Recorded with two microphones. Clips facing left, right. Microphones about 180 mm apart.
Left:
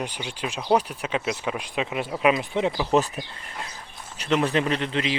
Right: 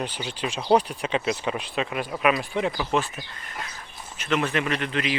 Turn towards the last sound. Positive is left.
turn(degrees=25)  # may be behind; listen again after turning